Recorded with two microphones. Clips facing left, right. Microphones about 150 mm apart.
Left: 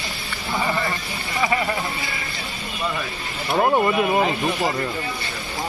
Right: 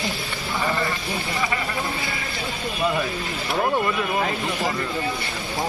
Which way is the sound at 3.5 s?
25° left (ahead or behind).